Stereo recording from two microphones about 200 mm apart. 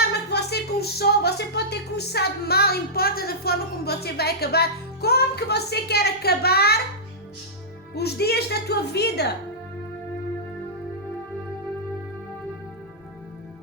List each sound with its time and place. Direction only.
0.3 s a woman's voice: 55° left (ahead or behind)
7.9 s a woman's voice: 55° left (ahead or behind)